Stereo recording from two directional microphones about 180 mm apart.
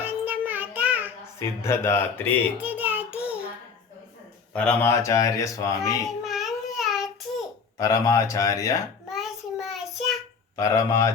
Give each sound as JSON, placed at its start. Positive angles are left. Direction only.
{"t": 0.0, "sound": "music", "side_deg": -10}
{"t": 1.4, "sound": "speech", "side_deg": 15}
{"t": 2.6, "sound": "child singing", "side_deg": -10}
{"t": 4.5, "sound": "speech", "side_deg": 10}
{"t": 6.2, "sound": "baby cry", "side_deg": 0}
{"t": 6.7, "sound": "child singing", "side_deg": 0}
{"t": 7.8, "sound": "speech", "side_deg": 20}
{"t": 9.0, "sound": "child singing", "side_deg": 0}
{"t": 10.6, "sound": "speech", "side_deg": 15}